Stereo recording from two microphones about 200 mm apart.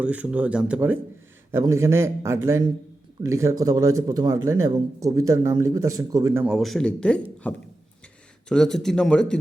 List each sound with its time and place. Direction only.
0.0 s speech: 5° right (ahead or behind)
7.4 s a sound: 5° left (ahead or behind)
8.4 s speech: 5° left (ahead or behind)